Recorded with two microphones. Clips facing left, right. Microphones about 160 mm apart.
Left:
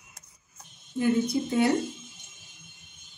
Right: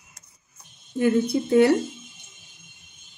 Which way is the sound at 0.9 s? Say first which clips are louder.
Right 4 dB; 65° right (ahead or behind).